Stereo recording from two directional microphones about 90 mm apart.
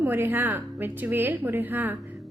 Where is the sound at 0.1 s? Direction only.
20° right (ahead or behind).